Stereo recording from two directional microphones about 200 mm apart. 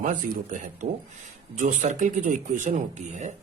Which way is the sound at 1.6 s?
40° right (ahead or behind).